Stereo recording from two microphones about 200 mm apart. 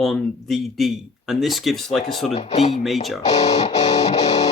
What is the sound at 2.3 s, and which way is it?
Speech, 30° left (ahead or behind).